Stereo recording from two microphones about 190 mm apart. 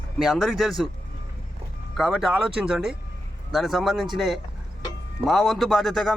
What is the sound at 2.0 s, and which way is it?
Speech, 5° right (ahead or behind).